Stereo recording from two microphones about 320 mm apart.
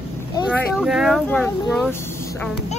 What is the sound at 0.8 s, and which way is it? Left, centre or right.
Speech, centre.